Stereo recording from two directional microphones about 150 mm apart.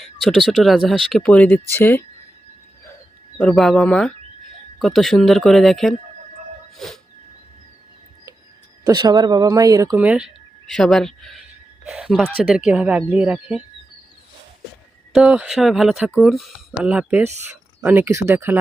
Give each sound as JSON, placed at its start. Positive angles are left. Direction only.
{"t": 0.0, "sound": "speech", "side_deg": 0}
{"t": 3.3, "sound": "speech", "side_deg": 5}
{"t": 6.7, "sound": "a sound", "side_deg": 0}
{"t": 8.8, "sound": "speech", "side_deg": -25}
{"t": 10.0, "sound": "speech", "side_deg": -10}
{"t": 10.7, "sound": "speech", "side_deg": 5}
{"t": 15.1, "sound": "speech", "side_deg": -5}